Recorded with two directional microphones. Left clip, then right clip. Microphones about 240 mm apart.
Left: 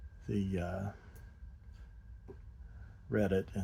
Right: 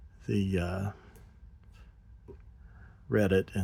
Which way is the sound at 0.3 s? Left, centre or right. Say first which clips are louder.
Right 6 dB; right.